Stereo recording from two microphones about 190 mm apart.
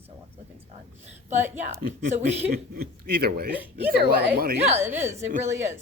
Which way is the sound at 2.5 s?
55° right (ahead or behind).